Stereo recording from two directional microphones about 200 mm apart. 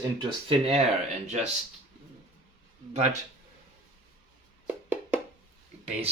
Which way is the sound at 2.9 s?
35° right (ahead or behind).